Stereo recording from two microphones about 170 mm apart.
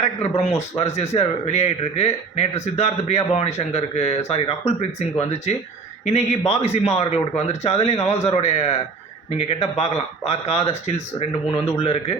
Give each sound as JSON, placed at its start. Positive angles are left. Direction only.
{"t": 0.0, "sound": "speech", "side_deg": 40}